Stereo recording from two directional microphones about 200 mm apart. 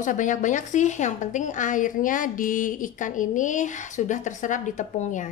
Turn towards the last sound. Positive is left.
turn(degrees=40)  # may be behind; listen again after turning